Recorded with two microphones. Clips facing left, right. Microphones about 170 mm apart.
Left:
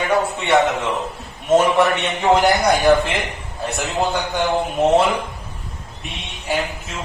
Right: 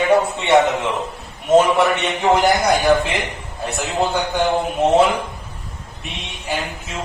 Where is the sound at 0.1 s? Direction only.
20° right (ahead or behind).